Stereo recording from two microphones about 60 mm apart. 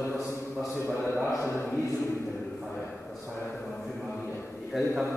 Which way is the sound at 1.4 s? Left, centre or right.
Left.